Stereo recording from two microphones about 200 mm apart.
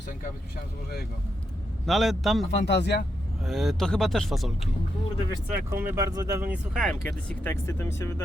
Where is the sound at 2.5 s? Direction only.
60° left (ahead or behind).